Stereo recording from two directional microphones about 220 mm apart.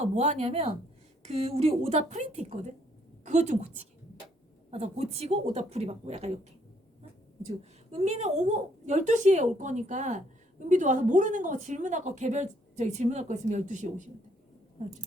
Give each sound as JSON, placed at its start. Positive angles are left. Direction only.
{"t": 0.0, "sound": "a woman's voice", "side_deg": -30}
{"t": 7.6, "sound": "a woman's voice", "side_deg": -30}